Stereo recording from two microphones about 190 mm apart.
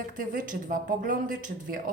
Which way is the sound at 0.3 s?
45° right (ahead or behind).